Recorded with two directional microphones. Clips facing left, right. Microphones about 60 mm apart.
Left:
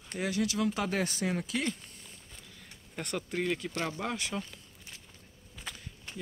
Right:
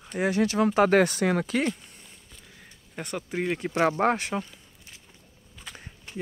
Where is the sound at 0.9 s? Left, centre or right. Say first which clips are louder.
Right 10 dB; right.